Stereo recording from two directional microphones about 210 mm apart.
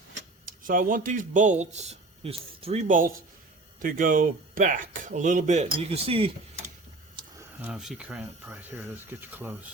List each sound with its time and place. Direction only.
0.4 s speech: 40° right (ahead or behind)
7.2 s a sound: 25° right (ahead or behind)
7.6 s speech: 5° right (ahead or behind)